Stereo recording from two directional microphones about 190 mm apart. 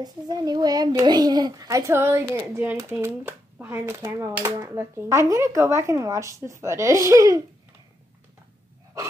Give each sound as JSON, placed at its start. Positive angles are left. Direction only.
{"t": 0.0, "sound": "a child's voice", "side_deg": -20}